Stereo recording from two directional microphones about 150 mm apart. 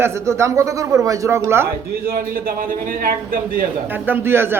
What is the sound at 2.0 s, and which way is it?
A man's voice, 70° right (ahead or behind).